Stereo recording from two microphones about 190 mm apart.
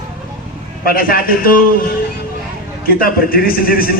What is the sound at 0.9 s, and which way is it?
Speech, 50° left (ahead or behind).